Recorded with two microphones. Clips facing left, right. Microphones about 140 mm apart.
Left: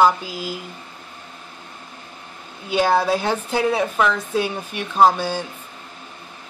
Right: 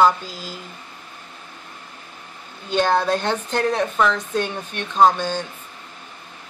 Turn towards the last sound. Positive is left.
turn(degrees=10)  # may be behind; listen again after turning